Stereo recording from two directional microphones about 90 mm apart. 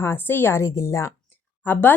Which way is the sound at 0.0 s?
25° left (ahead or behind).